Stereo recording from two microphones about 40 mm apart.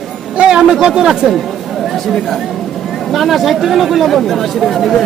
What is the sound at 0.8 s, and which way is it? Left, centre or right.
Speech, right.